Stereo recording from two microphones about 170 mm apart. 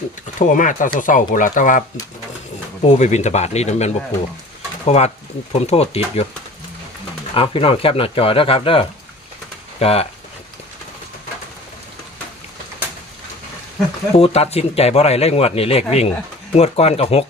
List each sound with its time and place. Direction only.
0.3 s speech: 50° left (ahead or behind)
2.8 s speech: 40° left (ahead or behind)
7.3 s speech: 35° left (ahead or behind)
14.1 s speech: 35° left (ahead or behind)